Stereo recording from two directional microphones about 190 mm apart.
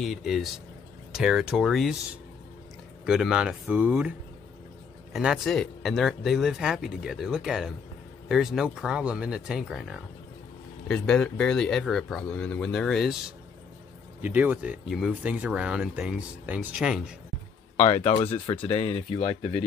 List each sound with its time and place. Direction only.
0.0 s speech: centre (ahead or behind)
3.1 s speech: 5° right (ahead or behind)
5.1 s speech: centre (ahead or behind)
17.7 s speech: 35° left (ahead or behind)